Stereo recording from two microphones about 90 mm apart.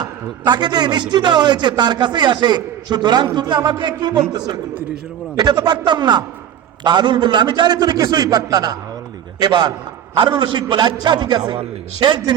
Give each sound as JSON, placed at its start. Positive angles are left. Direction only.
{"t": 0.0, "sound": "a man's voice", "side_deg": -55}